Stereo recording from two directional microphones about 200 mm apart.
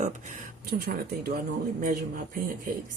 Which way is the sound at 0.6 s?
50° right (ahead or behind).